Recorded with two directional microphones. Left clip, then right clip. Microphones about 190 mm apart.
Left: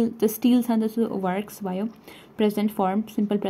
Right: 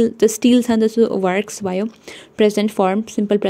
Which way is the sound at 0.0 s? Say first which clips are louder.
Right 8 dB; 15° right (ahead or behind).